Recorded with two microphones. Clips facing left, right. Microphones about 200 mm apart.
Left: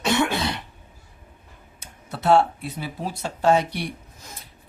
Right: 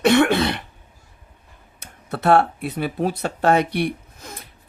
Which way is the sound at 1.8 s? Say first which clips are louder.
Right 3 dB; 55° right (ahead or behind).